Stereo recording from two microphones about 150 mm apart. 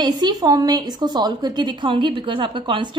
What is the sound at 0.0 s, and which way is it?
A woman's voice, 25° right (ahead or behind).